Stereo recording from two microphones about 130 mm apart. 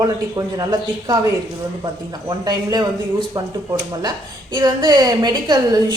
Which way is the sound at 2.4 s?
30° right (ahead or behind).